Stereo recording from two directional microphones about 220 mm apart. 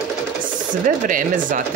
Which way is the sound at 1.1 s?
35° right (ahead or behind).